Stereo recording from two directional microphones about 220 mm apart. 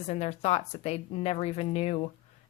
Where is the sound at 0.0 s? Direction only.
30° left (ahead or behind).